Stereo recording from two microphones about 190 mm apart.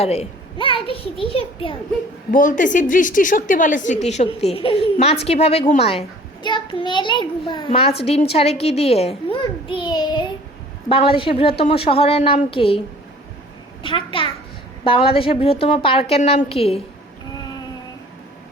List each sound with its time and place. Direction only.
0.0 s a child's voice: 35° left (ahead or behind)
2.3 s a woman's voice: 45° left (ahead or behind)
13.8 s a woman's voice: 25° left (ahead or behind)